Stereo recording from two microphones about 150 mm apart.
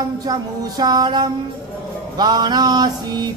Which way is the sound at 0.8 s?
25° right (ahead or behind).